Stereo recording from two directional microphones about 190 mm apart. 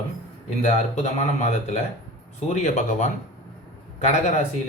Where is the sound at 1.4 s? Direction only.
40° left (ahead or behind).